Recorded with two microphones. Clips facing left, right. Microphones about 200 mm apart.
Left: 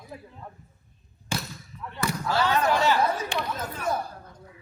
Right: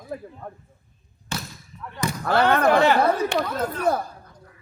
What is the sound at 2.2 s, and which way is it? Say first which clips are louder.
A man's voice: right 6 dB; 60° right (ahead or behind).